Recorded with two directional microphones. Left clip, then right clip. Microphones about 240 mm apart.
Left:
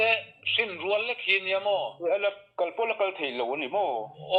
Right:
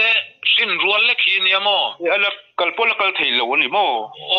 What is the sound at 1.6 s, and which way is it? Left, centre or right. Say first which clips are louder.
Speech: right 9 dB; right.